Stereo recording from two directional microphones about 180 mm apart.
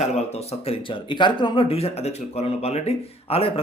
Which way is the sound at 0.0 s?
35° left (ahead or behind).